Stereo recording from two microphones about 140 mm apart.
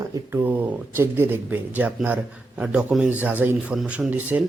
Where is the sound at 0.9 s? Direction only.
15° right (ahead or behind).